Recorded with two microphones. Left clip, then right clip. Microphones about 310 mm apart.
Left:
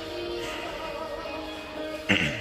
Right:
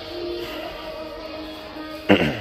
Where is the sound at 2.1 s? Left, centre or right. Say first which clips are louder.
Right 7 dB; centre.